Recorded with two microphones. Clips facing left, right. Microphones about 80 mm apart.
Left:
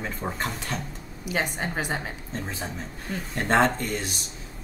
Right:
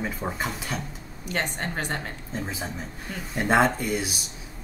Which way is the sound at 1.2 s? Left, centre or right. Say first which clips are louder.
Left 1 dB; centre.